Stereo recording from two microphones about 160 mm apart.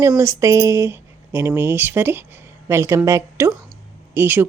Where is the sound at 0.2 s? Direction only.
20° right (ahead or behind).